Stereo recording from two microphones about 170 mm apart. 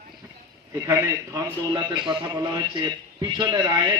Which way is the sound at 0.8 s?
20° right (ahead or behind).